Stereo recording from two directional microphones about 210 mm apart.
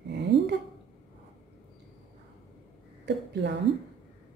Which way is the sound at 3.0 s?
55° right (ahead or behind).